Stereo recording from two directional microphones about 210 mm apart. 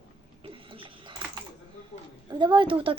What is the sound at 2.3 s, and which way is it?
Speech, 20° right (ahead or behind).